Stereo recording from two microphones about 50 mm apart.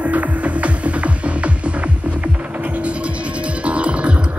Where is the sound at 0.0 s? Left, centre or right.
Right.